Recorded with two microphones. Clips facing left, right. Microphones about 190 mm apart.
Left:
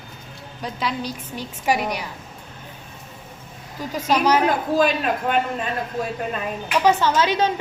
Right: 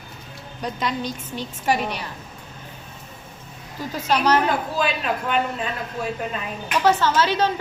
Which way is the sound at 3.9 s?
10° left (ahead or behind).